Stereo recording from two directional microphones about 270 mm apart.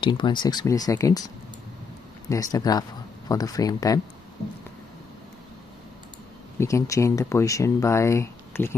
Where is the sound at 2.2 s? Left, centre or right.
Centre.